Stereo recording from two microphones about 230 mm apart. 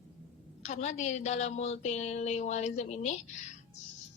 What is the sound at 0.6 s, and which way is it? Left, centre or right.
A woman's voice, left.